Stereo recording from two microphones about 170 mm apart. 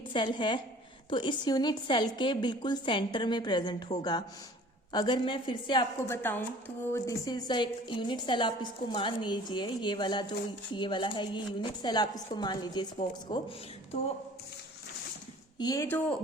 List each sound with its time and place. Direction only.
0.1 s a woman's voice: 30° left (ahead or behind)
6.1 s a woman's voice: 10° left (ahead or behind)
15.5 s a woman's voice: 20° left (ahead or behind)